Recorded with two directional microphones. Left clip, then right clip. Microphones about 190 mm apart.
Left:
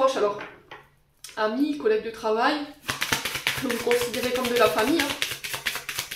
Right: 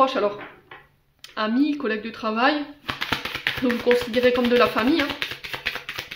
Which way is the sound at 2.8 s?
30° right (ahead or behind).